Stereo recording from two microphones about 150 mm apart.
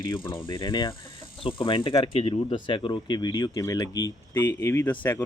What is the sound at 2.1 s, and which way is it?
Speech, 40° left (ahead or behind).